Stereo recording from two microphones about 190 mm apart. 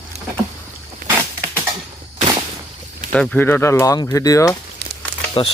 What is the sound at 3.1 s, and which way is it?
Speech, 5° left (ahead or behind).